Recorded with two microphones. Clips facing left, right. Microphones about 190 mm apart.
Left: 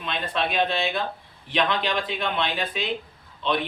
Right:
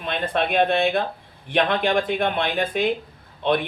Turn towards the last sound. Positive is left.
turn(degrees=-50)  # may be behind; listen again after turning